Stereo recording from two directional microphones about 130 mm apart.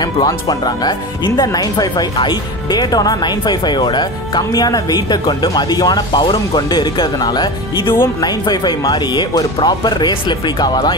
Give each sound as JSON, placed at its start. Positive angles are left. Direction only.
{"t": 0.0, "sound": "speech", "side_deg": 30}
{"t": 7.9, "sound": "speech", "side_deg": 20}
{"t": 8.3, "sound": "speech", "side_deg": 30}